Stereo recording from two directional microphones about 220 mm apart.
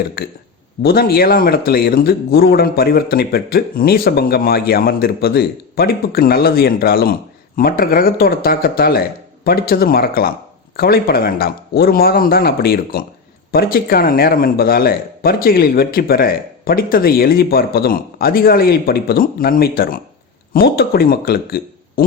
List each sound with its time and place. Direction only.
0.2 s speech: 45° left (ahead or behind)